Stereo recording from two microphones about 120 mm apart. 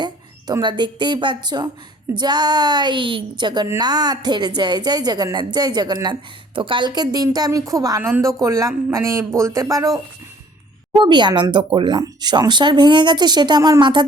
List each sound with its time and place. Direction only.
0.0 s a woman's voice: 35° right (ahead or behind)
11.0 s a woman's voice: 40° right (ahead or behind)